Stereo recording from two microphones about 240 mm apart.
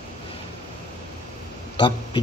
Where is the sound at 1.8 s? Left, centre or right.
Centre.